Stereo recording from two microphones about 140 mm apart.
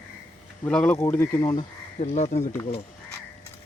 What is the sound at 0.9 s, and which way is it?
Speech, 20° left (ahead or behind).